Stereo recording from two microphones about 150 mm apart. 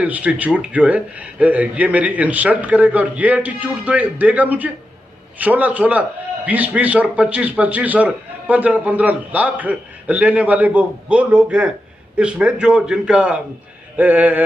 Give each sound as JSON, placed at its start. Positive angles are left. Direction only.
{"t": 0.0, "sound": "a man's voice", "side_deg": -10}